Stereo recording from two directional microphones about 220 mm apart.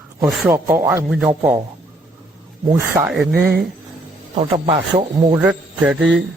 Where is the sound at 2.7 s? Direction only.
10° right (ahead or behind).